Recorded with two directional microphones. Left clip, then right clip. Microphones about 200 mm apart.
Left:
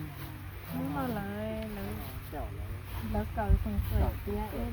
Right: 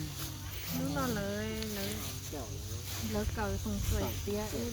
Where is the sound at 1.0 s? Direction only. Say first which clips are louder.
Right 1 dB; 30° left (ahead or behind).